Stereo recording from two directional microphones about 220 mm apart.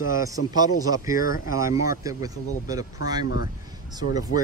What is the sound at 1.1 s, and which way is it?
Speech, 40° left (ahead or behind).